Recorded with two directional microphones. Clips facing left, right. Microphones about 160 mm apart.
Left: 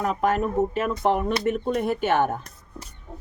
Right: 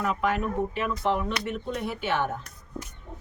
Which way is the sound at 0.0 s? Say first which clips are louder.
Left 4 dB; 45° left (ahead or behind).